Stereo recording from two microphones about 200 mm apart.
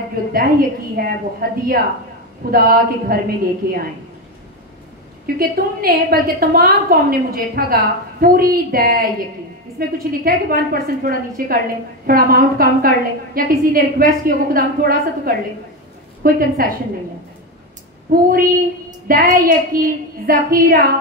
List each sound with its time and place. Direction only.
0.3 s a woman's voice: 45° right (ahead or behind)
5.2 s a woman's voice: 50° right (ahead or behind)
19.0 s a woman's voice: 45° right (ahead or behind)